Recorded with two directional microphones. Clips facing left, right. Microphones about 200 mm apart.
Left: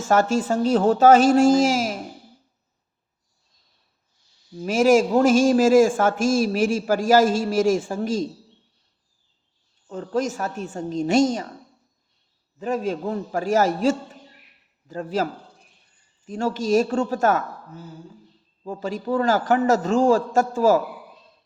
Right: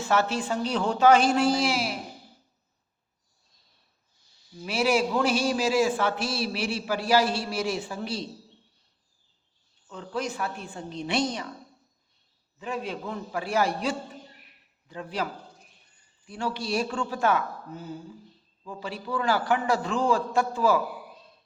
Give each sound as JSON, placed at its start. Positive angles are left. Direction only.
{"t": 0.0, "sound": "a man's voice", "side_deg": 45}
{"t": 4.5, "sound": "a man's voice", "side_deg": 45}
{"t": 9.9, "sound": "a man's voice", "side_deg": 45}
{"t": 12.5, "sound": "a man's voice", "side_deg": 45}
{"t": 18.6, "sound": "a man's voice", "side_deg": 45}